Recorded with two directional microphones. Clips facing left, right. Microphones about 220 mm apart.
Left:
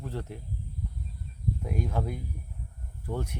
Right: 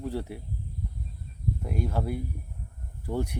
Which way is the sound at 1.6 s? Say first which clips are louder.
Right 1 dB; 5° right (ahead or behind).